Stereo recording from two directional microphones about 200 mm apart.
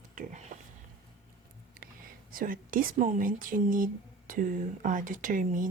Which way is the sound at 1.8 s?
45° right (ahead or behind).